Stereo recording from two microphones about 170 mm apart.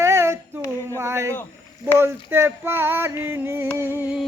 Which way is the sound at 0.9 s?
15° right (ahead or behind).